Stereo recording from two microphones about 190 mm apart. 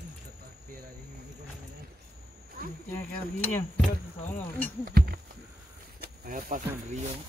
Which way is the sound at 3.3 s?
10° left (ahead or behind).